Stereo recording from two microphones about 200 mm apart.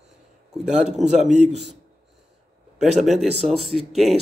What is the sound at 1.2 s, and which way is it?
Speech, 35° right (ahead or behind).